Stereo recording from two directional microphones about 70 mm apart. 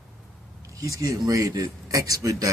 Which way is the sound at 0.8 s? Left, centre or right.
Right.